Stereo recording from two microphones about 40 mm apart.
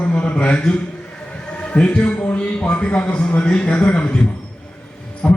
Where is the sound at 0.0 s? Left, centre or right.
Left.